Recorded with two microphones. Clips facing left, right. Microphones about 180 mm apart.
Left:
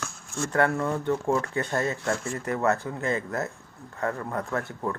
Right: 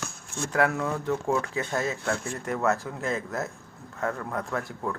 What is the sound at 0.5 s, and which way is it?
Speech, 5° right (ahead or behind).